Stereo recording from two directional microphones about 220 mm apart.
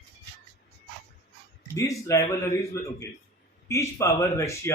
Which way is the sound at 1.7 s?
15° left (ahead or behind).